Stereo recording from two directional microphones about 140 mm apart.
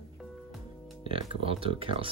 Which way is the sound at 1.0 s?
40° right (ahead or behind).